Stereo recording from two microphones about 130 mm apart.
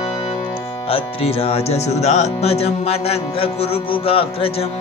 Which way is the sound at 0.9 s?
50° left (ahead or behind).